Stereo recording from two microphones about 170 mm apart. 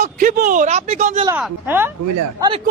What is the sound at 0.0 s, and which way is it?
Speech, 50° right (ahead or behind).